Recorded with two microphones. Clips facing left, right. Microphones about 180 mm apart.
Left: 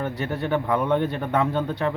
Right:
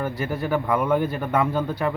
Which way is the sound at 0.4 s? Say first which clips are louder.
Even; 30° left (ahead or behind).